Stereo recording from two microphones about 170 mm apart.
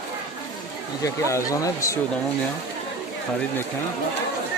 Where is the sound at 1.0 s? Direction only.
20° left (ahead or behind).